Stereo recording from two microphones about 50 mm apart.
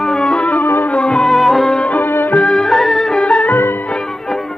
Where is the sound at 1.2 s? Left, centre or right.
Centre.